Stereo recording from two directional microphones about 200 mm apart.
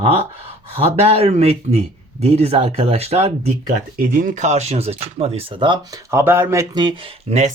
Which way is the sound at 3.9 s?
45° right (ahead or behind).